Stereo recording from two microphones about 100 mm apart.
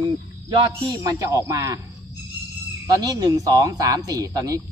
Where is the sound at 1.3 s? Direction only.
35° right (ahead or behind).